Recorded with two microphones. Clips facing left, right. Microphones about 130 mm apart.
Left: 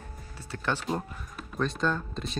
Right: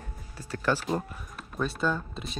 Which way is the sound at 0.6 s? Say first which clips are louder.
Right 3 dB; 5° right (ahead or behind).